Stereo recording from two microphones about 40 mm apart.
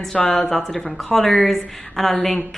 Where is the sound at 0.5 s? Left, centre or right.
Centre.